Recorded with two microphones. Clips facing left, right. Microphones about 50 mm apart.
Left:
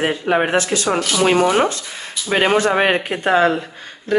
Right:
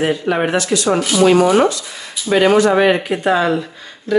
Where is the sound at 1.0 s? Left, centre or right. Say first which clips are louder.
Right 4 dB; centre.